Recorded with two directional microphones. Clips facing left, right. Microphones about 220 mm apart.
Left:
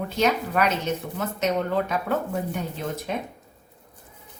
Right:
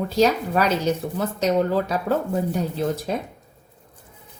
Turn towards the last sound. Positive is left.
turn(degrees=-35)  # may be behind; listen again after turning